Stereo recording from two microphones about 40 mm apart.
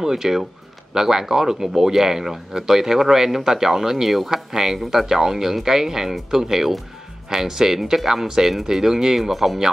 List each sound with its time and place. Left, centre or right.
0.0 s speech: centre